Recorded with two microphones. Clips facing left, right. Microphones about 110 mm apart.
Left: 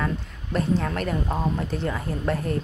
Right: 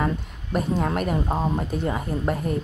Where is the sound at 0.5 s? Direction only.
15° right (ahead or behind).